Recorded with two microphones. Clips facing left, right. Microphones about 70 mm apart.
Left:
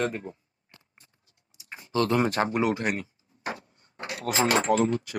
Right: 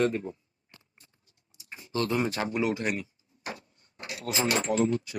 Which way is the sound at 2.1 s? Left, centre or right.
Left.